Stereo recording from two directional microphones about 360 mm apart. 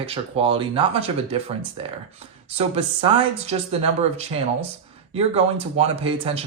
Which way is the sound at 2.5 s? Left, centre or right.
Centre.